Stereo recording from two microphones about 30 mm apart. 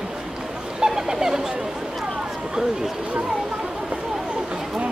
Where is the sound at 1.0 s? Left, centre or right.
Centre.